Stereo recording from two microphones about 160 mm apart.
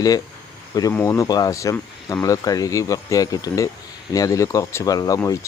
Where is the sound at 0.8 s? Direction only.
20° left (ahead or behind).